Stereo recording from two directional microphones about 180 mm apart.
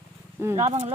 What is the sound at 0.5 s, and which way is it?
Speech, 35° right (ahead or behind).